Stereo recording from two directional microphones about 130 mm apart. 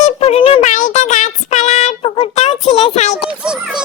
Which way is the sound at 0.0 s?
50° left (ahead or behind).